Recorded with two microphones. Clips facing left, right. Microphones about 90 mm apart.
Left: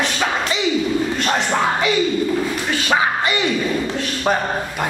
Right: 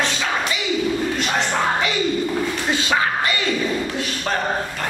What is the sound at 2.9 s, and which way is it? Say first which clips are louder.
Music: left 4 dB; 20° left (ahead or behind).